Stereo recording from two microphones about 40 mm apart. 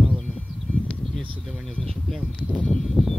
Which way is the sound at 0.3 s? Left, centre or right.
Left.